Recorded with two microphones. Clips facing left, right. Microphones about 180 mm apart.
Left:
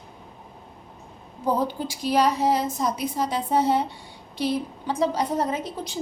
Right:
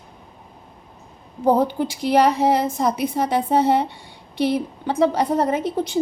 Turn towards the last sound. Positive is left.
turn(degrees=-60)  # may be behind; listen again after turning